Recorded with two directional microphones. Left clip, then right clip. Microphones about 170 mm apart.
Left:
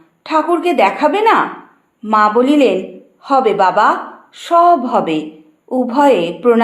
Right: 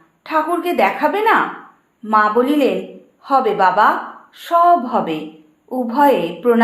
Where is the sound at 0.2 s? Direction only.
25° left (ahead or behind).